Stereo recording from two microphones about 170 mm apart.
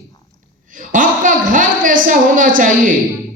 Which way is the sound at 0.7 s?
50° right (ahead or behind).